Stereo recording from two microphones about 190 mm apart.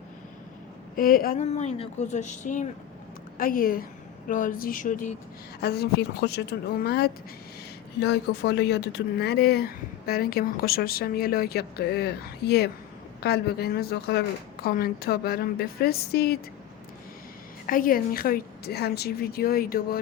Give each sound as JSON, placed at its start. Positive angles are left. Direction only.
{"t": 0.9, "sound": "speech", "side_deg": 50}
{"t": 1.5, "sound": "speech", "side_deg": 35}
{"t": 5.6, "sound": "speech", "side_deg": 60}
{"t": 17.7, "sound": "speech", "side_deg": 45}